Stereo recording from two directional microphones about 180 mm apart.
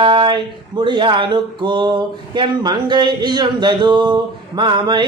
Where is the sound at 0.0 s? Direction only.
25° right (ahead or behind).